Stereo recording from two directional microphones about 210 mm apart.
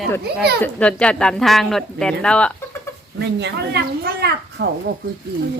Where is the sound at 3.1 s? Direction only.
55° right (ahead or behind).